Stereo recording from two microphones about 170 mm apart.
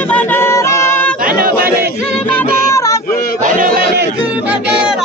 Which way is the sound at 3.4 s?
55° right (ahead or behind).